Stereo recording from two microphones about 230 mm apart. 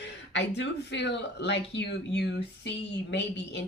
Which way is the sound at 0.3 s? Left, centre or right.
Left.